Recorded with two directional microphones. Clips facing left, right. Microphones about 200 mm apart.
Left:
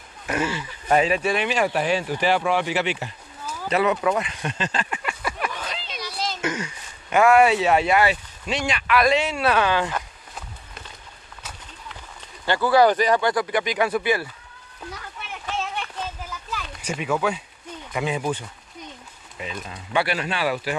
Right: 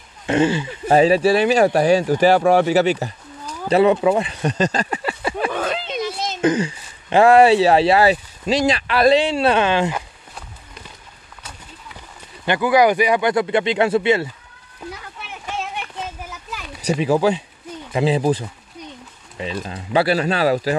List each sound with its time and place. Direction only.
0.3 s speech: 30° right (ahead or behind)
5.5 s a sound: 55° right (ahead or behind)
5.9 s speech: 25° right (ahead or behind)
12.4 s speech: 15° right (ahead or behind)
13.3 s speech: 25° right (ahead or behind)
16.8 s speech: 35° right (ahead or behind)